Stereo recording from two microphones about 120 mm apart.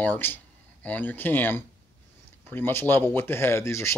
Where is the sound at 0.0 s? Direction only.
15° left (ahead or behind).